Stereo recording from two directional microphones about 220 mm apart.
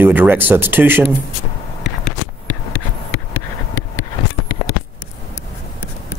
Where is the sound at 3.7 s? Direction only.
15° left (ahead or behind).